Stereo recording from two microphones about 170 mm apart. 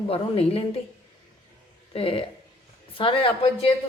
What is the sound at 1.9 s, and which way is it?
Speech, 35° left (ahead or behind).